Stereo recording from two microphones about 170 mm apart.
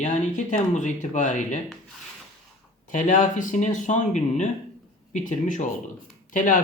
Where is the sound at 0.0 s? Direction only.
45° left (ahead or behind).